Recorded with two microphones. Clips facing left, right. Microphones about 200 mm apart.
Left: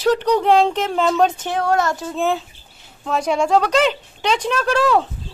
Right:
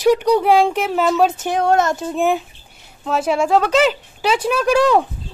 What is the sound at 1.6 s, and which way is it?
Speech, 25° right (ahead or behind).